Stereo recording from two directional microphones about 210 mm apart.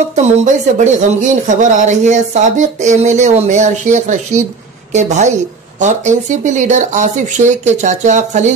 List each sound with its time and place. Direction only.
0.1 s speech: 30° right (ahead or behind)